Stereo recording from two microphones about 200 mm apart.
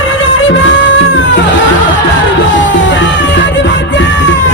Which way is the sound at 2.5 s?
70° left (ahead or behind).